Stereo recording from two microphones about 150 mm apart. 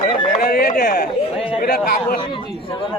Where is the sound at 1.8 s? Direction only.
80° left.